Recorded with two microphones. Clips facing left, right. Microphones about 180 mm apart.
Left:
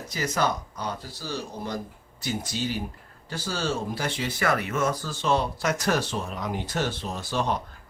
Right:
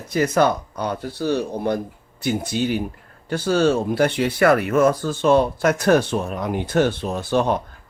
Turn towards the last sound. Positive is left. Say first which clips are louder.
# right 8 dB
turn(degrees=-55)  # may be behind; listen again after turning